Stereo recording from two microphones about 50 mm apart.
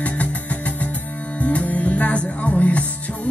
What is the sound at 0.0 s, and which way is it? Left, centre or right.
Music, left.